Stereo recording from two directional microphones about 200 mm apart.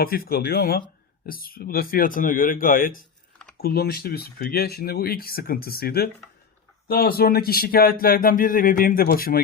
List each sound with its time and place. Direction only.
0.0 s speech: 50° left (ahead or behind)